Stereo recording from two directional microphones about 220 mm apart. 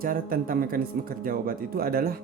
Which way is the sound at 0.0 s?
40° right (ahead or behind).